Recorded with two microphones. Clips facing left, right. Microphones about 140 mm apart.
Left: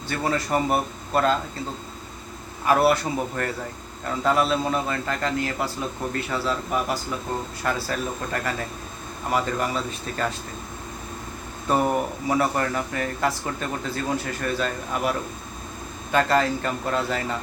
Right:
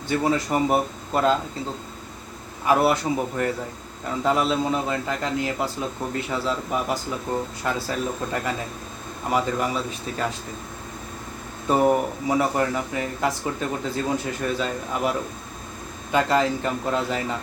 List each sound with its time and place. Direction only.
0.1 s speech: 15° right (ahead or behind)
2.6 s speech: 20° right (ahead or behind)
11.7 s speech: 15° right (ahead or behind)
16.1 s speech: 15° right (ahead or behind)